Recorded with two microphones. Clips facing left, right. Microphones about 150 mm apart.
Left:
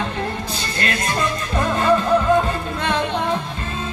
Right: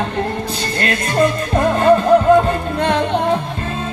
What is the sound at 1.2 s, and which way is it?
Music, 45° right (ahead or behind).